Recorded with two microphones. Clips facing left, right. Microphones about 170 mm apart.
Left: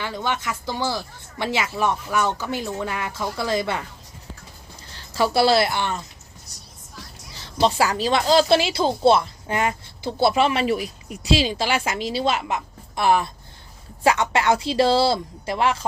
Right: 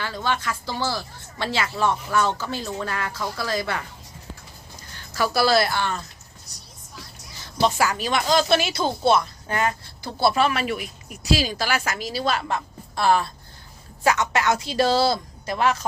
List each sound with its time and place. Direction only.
0.0 s speech: 20° left (ahead or behind)
4.9 s a woman's voice: 30° left (ahead or behind)
7.6 s speech: 30° left (ahead or behind)